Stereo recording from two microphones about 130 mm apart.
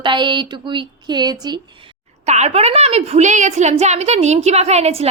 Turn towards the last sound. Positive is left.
turn(degrees=-55)  # may be behind; listen again after turning